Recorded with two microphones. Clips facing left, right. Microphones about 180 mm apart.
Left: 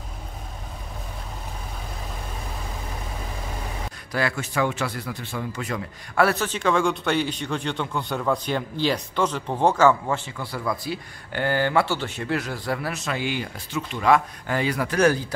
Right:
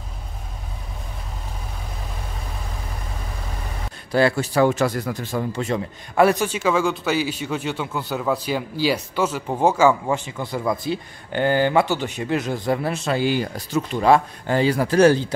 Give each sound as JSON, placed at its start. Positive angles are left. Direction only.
{"t": 4.1, "sound": "speech", "side_deg": -30}